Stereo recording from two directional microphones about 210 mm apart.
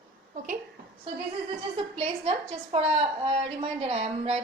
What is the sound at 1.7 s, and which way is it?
A woman's voice, 30° right (ahead or behind).